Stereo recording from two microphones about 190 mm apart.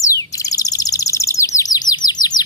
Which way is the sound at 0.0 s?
20° left (ahead or behind).